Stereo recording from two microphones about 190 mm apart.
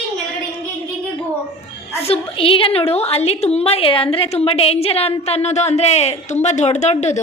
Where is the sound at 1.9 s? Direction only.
30° left (ahead or behind).